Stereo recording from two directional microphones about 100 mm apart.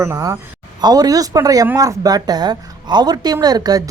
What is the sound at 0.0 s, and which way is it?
Speech, 35° right (ahead or behind).